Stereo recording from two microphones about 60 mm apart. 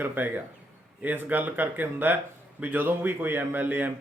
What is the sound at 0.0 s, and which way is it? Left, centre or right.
Speech, right.